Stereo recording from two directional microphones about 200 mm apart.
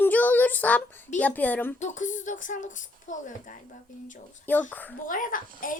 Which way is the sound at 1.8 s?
40° left (ahead or behind).